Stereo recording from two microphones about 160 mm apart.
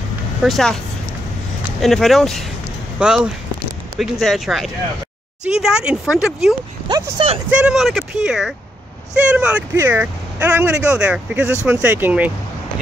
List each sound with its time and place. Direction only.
0.4 s speech: centre (ahead or behind)
1.8 s speech: centre (ahead or behind)
6.9 s speech: 30° right (ahead or behind)
7.4 s speech: 5° right (ahead or behind)